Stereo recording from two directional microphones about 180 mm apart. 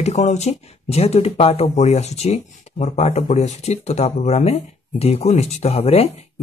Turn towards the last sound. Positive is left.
turn(degrees=35)  # may be behind; listen again after turning